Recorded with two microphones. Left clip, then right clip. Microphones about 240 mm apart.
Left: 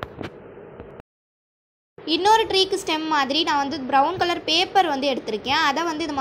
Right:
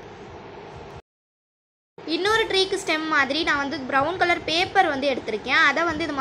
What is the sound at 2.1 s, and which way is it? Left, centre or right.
A woman's voice, centre.